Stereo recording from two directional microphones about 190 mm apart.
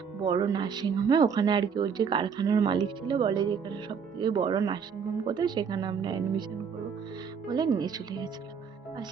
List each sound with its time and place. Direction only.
0.2 s speech: 20° right (ahead or behind)
7.4 s speech: 20° right (ahead or behind)